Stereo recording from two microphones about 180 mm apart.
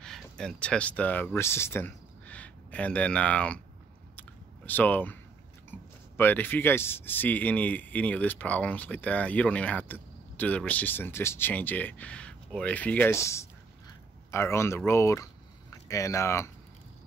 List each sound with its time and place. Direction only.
0.0 s speech: 5° left (ahead or behind)
4.2 s a sound: 10° left (ahead or behind)
5.7 s speech: 10° left (ahead or behind)